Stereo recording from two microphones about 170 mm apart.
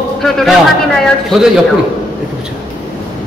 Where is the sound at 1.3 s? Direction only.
5° right (ahead or behind).